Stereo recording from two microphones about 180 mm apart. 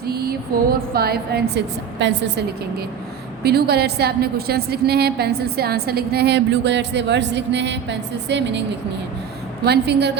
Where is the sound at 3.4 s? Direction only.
60° right (ahead or behind).